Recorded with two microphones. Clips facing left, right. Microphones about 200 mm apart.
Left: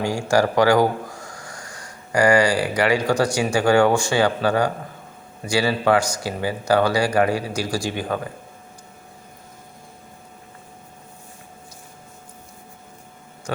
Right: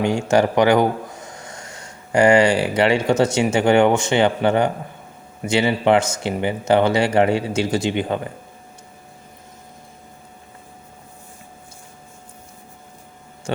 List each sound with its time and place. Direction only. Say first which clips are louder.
0.0 s speech: right 2 dB; 20° right (ahead or behind)